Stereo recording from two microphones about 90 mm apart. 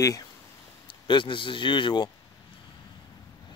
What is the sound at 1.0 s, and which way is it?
A man's voice, 65° left (ahead or behind).